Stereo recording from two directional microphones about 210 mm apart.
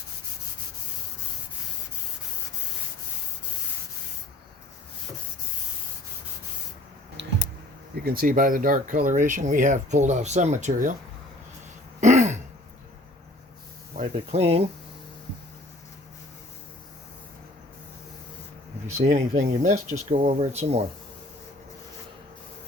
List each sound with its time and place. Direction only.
7.2 s clicking: 55° right (ahead or behind)
7.9 s speech: 45° right (ahead or behind)
11.9 s throat clearing: 35° right (ahead or behind)
13.9 s speech: 35° right (ahead or behind)
18.9 s speech: 35° right (ahead or behind)